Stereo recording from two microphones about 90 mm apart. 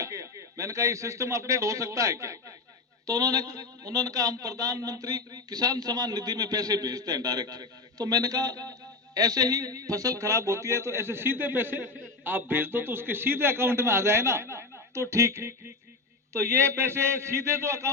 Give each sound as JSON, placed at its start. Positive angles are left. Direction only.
{"t": 0.0, "sound": "a man's voice", "side_deg": -35}